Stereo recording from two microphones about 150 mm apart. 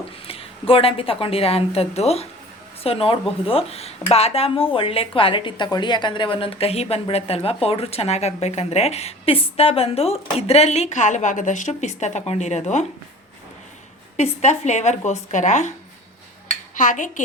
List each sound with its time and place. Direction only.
0.7 s speech: 40° left (ahead or behind)
14.2 s speech: 50° left (ahead or behind)
16.7 s dishes: 60° left (ahead or behind)